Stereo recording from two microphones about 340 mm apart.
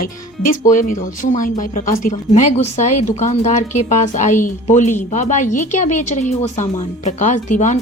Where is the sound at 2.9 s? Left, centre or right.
Left.